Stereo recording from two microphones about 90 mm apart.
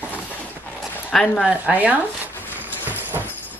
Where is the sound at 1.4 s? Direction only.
15° right (ahead or behind).